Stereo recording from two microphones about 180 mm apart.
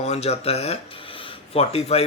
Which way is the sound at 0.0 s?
35° left (ahead or behind).